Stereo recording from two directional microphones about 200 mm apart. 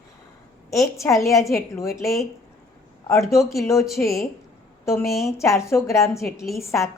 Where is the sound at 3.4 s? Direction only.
Centre (ahead or behind).